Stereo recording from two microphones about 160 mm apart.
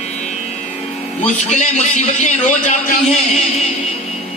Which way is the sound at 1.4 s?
45° left (ahead or behind).